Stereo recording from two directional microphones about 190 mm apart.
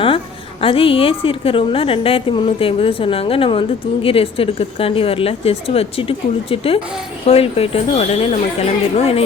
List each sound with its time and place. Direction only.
0.6 s a woman's voice: 30° left (ahead or behind)